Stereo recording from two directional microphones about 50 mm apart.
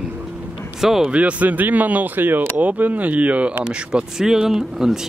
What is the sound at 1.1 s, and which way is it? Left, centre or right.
Speech, right.